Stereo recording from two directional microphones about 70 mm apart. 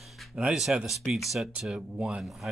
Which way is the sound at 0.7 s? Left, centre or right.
Centre.